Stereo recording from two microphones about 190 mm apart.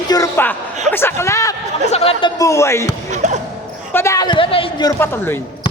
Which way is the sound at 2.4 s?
15° left (ahead or behind).